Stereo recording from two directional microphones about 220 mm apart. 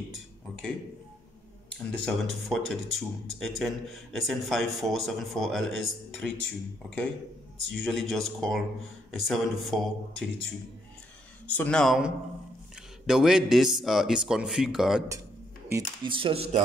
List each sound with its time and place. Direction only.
1.9 s speech: centre (ahead or behind)
7.7 s speech: centre (ahead or behind)
11.5 s speech: 5° left (ahead or behind)
15.7 s speech: 20° right (ahead or behind)